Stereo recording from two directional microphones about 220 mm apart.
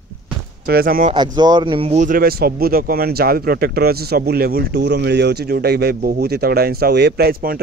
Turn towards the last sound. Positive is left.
turn(degrees=-40)  # may be behind; listen again after turning